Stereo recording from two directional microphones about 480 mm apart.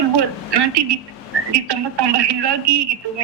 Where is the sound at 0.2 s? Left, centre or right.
Right.